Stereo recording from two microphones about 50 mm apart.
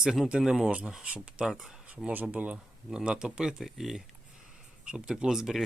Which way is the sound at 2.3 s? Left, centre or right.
Right.